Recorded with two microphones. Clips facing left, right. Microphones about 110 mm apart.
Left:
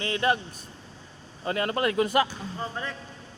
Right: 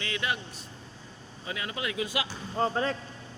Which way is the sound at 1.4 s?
50° left (ahead or behind).